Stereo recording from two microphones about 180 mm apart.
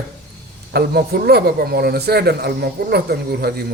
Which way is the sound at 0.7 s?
60° right (ahead or behind).